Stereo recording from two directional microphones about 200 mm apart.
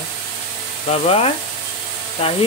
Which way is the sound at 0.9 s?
30° left (ahead or behind).